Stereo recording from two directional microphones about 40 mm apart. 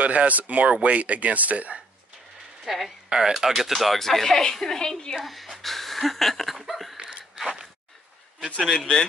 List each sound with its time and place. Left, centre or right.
0.0 s speech: right
2.6 s speech: centre
3.1 s speech: centre
5.1 s a woman's voice: centre
6.5 s laughter: centre
7.3 s a sound: centre
8.7 s speech: centre